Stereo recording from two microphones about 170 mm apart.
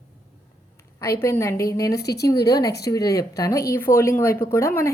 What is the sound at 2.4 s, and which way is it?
A woman's voice, 20° left (ahead or behind).